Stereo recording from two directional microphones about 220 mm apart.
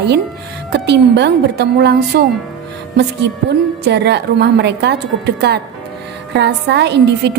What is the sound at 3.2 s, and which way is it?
A woman's voice, 50° right (ahead or behind).